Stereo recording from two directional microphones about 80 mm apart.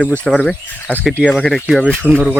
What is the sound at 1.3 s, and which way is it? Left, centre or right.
Speech, centre.